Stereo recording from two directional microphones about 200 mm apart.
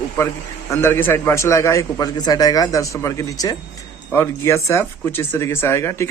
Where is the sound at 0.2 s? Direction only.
10° left (ahead or behind).